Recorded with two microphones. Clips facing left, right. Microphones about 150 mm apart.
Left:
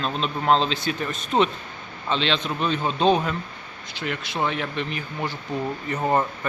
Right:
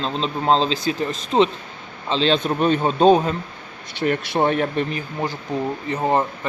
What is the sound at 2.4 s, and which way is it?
Speech, 45° right (ahead or behind).